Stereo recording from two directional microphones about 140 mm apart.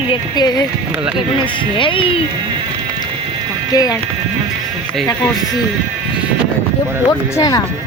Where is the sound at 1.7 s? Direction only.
35° left (ahead or behind).